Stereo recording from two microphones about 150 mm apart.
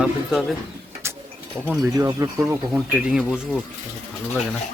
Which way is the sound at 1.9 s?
25° right (ahead or behind).